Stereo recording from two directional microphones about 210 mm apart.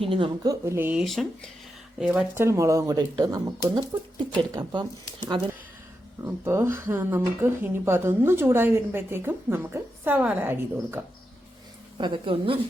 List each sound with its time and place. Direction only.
0.0 s speech: 25° right (ahead or behind)
0.6 s speech: 10° right (ahead or behind)
11.9 s speech: 25° right (ahead or behind)